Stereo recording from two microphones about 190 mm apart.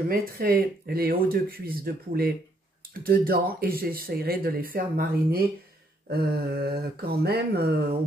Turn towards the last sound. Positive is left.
turn(degrees=-55)  # may be behind; listen again after turning